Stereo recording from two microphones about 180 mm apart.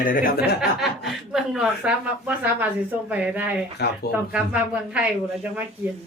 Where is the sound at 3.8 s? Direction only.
65° left (ahead or behind).